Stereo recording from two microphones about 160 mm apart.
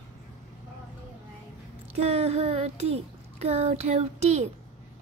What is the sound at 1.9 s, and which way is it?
Child singing, 40° right (ahead or behind).